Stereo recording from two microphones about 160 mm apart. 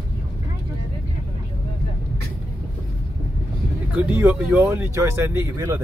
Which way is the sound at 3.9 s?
15° right (ahead or behind).